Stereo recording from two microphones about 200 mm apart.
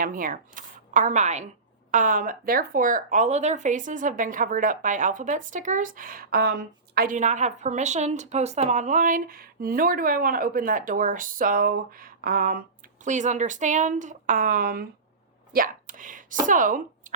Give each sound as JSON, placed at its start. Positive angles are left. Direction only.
{"t": 0.0, "sound": "a woman's voice", "side_deg": -45}
{"t": 15.5, "sound": "a sound", "side_deg": -45}
{"t": 16.5, "sound": "speech", "side_deg": -40}